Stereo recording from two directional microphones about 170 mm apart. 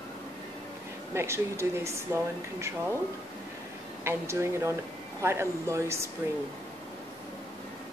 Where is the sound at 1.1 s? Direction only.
15° right (ahead or behind).